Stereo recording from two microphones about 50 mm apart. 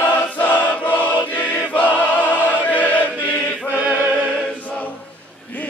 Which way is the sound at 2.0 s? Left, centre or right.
Left.